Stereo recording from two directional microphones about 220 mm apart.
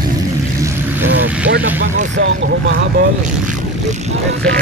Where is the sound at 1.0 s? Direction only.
65° right (ahead or behind).